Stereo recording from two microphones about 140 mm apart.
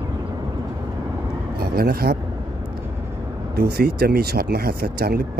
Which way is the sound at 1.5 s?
90° right.